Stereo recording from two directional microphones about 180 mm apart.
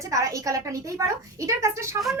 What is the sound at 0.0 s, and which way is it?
Speech, 15° right (ahead or behind).